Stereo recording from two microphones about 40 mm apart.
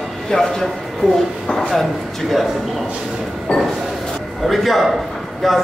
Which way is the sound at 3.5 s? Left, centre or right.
Left.